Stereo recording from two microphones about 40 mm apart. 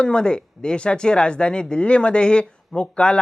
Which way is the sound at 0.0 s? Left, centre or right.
Left.